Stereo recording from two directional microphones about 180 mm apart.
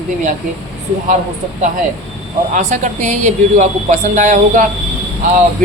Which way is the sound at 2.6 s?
40° right (ahead or behind).